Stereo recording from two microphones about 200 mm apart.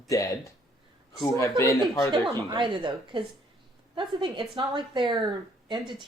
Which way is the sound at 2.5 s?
25° right (ahead or behind).